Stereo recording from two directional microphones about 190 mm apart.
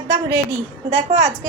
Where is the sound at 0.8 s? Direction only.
45° right (ahead or behind).